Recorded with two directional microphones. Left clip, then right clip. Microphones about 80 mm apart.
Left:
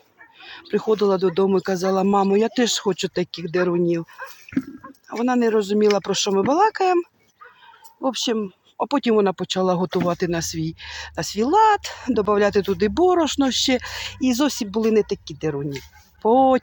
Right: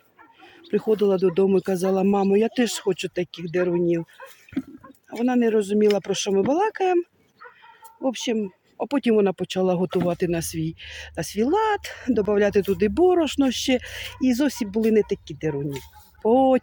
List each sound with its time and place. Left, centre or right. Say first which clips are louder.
0.4 s a sound: left 1 dB; right
0.9 s speech: left 1 dB; right
4.5 s a sound: left 4 dB; centre
5.2 s speech: left 2 dB; right
8.0 s speech: left 2 dB; right
14.9 s speech: left 1 dB; right
15.5 s speech: left 1 dB; centre